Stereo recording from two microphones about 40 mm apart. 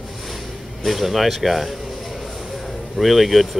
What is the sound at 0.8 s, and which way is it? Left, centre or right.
Speech, centre.